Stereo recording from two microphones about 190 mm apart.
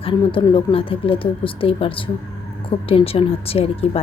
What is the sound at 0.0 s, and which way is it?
A woman's voice, 25° left (ahead or behind).